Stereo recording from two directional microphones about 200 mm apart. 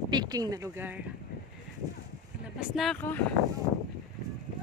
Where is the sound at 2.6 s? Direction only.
Centre (ahead or behind).